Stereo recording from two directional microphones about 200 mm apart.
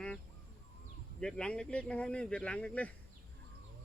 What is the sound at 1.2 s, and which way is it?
Speech, 5° left (ahead or behind).